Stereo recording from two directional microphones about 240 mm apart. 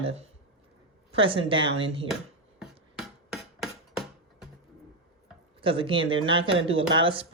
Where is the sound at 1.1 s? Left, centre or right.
Right.